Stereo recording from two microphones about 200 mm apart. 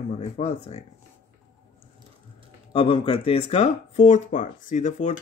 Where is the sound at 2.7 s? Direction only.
25° left (ahead or behind).